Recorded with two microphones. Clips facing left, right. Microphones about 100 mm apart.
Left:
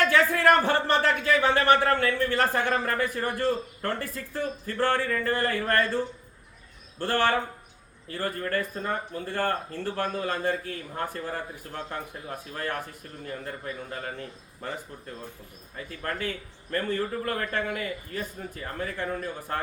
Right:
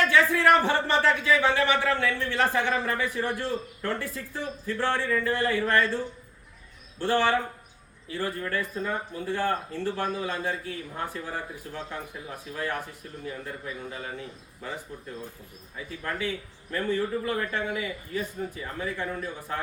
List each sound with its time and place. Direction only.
0.0 s speech: 50° left (ahead or behind)
7.0 s speech: 50° left (ahead or behind)
13.9 s speech: 55° left (ahead or behind)
15.9 s speech: 50° left (ahead or behind)